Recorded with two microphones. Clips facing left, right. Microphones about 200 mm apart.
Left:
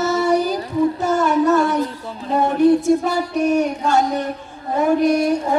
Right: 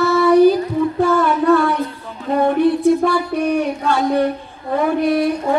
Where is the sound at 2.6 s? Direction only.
45° left (ahead or behind).